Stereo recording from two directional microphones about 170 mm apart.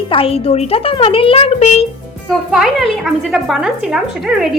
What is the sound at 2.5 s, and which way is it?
A woman's voice, centre (ahead or behind).